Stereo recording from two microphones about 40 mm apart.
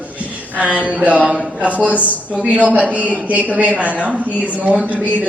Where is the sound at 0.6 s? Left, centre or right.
Right.